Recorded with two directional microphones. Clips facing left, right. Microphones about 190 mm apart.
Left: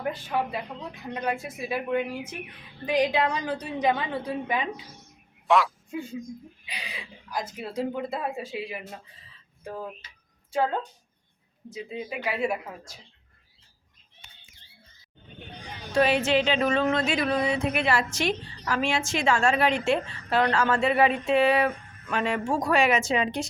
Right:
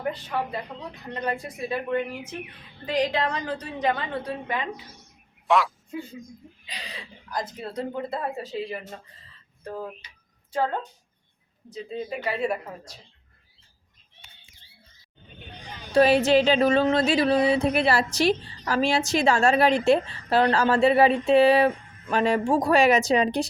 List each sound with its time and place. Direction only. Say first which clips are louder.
0.3 s speech: left 1 dB; 5° left (ahead or behind)
5.5 s a woman's voice: even; centre (ahead or behind)
16.0 s a sound: right 4 dB; 35° right (ahead or behind)